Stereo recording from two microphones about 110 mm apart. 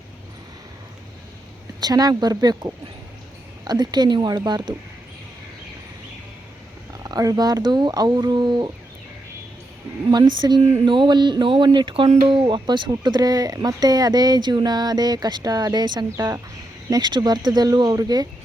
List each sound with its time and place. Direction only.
1.8 s speech: 35° right (ahead or behind)
7.0 s speech: 35° right (ahead or behind)
10.1 s speech: 40° right (ahead or behind)